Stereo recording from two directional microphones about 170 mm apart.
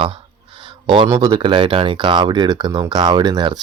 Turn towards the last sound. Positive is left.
turn(degrees=-25)  # may be behind; listen again after turning